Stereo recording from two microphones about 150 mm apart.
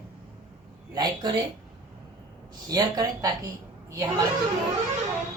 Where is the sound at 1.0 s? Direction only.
30° right (ahead or behind).